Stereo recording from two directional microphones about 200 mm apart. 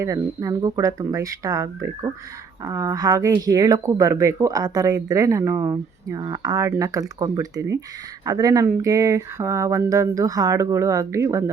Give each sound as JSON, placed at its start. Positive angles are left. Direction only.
{"t": 0.0, "sound": "speech", "side_deg": -15}